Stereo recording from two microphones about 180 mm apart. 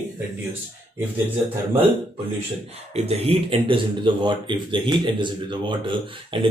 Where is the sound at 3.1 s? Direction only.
30° right (ahead or behind).